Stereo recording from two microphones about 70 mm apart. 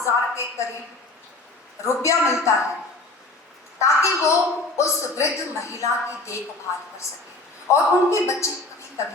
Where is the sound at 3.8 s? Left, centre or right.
Left.